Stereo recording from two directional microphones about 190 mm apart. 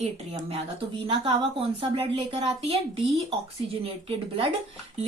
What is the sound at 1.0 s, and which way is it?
A woman's voice, 30° right (ahead or behind).